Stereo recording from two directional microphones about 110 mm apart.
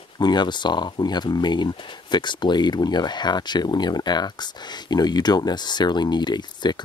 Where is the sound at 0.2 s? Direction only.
40° left (ahead or behind).